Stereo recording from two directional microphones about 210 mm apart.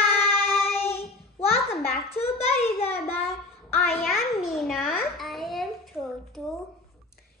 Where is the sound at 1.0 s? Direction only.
30° left (ahead or behind).